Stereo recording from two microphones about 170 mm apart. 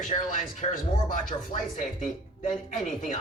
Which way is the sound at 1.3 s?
30° left (ahead or behind).